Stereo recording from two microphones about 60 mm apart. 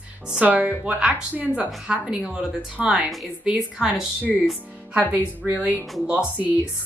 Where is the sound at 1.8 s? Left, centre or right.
Centre.